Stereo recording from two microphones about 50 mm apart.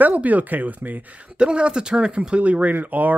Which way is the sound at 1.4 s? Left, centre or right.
Centre.